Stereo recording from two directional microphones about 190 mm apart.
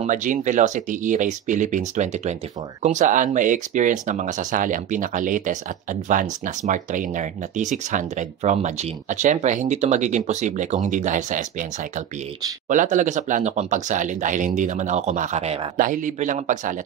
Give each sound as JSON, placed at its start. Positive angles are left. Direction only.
{"t": 0.0, "sound": "speech", "side_deg": -40}
{"t": 12.6, "sound": "speech", "side_deg": -40}